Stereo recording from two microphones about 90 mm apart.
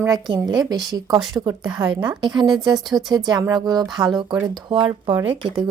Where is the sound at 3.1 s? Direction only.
50° right (ahead or behind).